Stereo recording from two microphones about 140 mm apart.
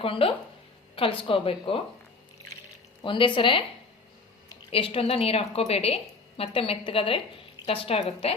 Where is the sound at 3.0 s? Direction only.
35° left (ahead or behind).